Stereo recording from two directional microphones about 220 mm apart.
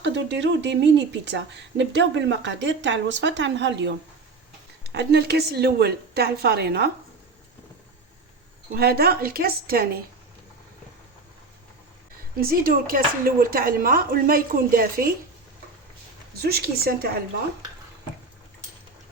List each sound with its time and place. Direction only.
0.0 s a woman's voice: 55° right (ahead or behind)
8.7 s a woman's voice: 45° right (ahead or behind)
12.4 s speech: 40° right (ahead or behind)
16.4 s a woman's voice: 45° right (ahead or behind)